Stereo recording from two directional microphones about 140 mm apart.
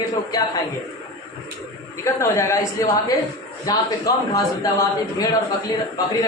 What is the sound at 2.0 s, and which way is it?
A man's voice, 20° left (ahead or behind).